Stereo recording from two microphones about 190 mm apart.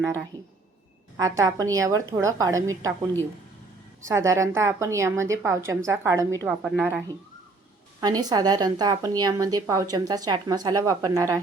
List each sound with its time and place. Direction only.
1.1 s a woman's voice: 15° right (ahead or behind)
4.0 s a woman's voice: 15° right (ahead or behind)
8.0 s a woman's voice: 20° right (ahead or behind)